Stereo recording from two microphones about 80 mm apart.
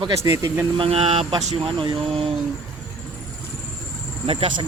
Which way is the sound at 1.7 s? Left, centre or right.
Right.